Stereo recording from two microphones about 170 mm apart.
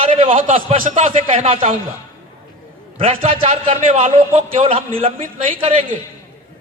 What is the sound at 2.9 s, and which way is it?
A man's voice, 35° right (ahead or behind).